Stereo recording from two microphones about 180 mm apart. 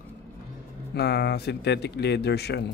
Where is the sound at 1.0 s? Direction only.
65° left (ahead or behind).